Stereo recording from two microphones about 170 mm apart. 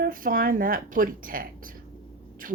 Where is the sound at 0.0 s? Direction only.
55° right (ahead or behind).